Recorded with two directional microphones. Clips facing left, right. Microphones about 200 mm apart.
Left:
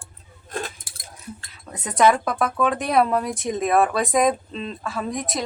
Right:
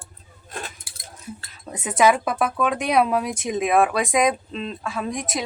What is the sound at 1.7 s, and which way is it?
A woman's voice, 5° right (ahead or behind).